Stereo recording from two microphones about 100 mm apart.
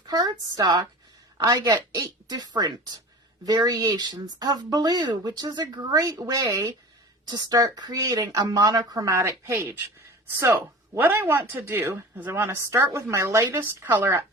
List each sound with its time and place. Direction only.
0.1 s a woman's voice: 40° right (ahead or behind)